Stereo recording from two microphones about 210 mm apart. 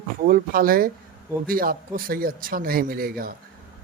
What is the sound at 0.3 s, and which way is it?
Speech, 45° right (ahead or behind).